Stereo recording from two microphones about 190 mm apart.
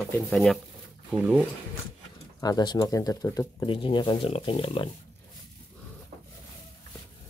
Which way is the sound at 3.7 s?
25° left (ahead or behind).